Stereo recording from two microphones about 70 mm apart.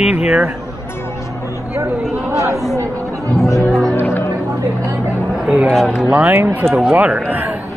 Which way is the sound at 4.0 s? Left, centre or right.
Left.